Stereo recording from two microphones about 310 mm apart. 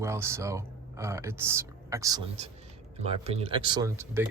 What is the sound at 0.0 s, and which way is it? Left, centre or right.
Speech, centre.